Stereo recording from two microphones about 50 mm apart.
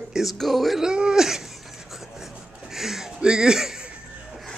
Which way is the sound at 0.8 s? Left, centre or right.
Centre.